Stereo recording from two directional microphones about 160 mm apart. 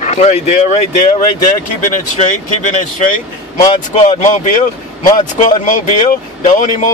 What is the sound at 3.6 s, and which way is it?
Speech, 40° left (ahead or behind).